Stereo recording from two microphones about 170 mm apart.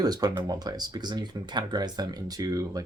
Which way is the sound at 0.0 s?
25° right (ahead or behind).